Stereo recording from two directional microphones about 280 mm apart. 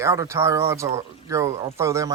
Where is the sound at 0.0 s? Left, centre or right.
Centre.